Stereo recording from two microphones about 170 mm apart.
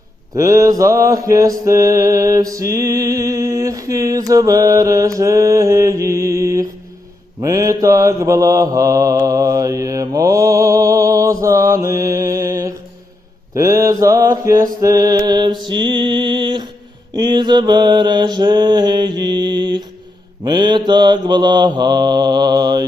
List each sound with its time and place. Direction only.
0.3 s mantra: 20° right (ahead or behind)
15.6 s music: 30° right (ahead or behind)
17.2 s mantra: 25° right (ahead or behind)